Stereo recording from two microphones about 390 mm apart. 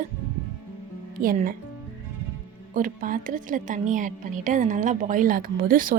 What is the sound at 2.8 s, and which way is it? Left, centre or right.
A woman's voice, right.